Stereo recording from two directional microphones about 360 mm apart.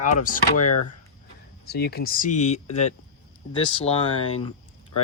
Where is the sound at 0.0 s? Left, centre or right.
Left.